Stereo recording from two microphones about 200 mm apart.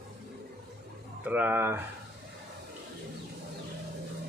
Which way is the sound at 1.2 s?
10° right (ahead or behind).